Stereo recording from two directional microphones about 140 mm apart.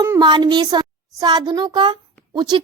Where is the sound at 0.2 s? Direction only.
30° right (ahead or behind).